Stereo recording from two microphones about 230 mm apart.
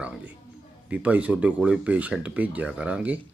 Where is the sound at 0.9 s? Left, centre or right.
Centre.